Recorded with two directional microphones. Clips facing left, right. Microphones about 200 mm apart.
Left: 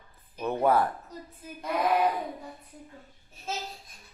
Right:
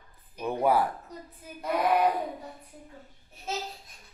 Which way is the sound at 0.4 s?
10° right (ahead or behind).